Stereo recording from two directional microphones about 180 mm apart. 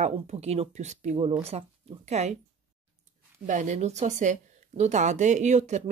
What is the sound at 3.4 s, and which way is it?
Speech, 45° right (ahead or behind).